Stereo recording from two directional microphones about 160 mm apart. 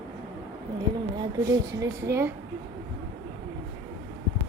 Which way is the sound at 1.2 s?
20° right (ahead or behind).